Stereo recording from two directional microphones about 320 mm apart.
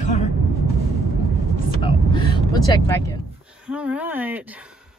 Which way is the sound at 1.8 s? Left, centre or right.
Centre.